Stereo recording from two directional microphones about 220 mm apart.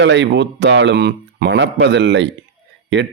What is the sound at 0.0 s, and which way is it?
A man's voice, 55° right (ahead or behind).